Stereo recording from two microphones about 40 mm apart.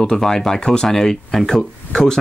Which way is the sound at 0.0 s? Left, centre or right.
Centre.